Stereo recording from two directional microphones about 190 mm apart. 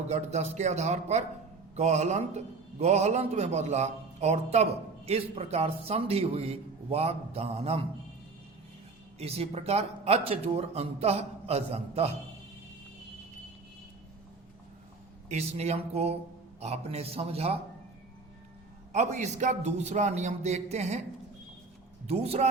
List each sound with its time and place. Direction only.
0.1 s a man's voice: 35° right (ahead or behind)
9.1 s a man's voice: 30° right (ahead or behind)
15.3 s a man's voice: 35° right (ahead or behind)
18.9 s a man's voice: 35° right (ahead or behind)
22.0 s speech: 30° right (ahead or behind)